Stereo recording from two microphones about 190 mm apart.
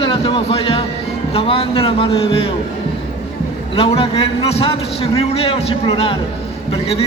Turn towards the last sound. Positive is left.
turn(degrees=30)  # may be behind; listen again after turning